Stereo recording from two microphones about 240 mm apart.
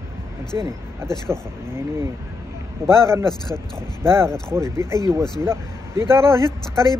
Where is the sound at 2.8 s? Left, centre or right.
Centre.